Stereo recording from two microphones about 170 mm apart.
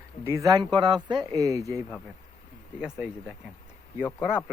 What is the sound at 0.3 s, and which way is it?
Speech, 20° right (ahead or behind).